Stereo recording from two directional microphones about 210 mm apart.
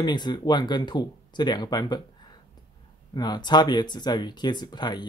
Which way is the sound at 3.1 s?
20° left (ahead or behind).